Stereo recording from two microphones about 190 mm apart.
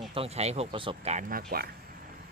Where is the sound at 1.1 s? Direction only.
50° right (ahead or behind).